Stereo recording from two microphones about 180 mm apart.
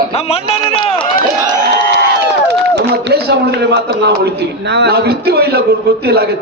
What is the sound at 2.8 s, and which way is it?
A man's voice, 70° right (ahead or behind).